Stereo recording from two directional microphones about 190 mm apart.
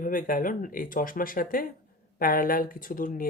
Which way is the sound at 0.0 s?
45° left (ahead or behind).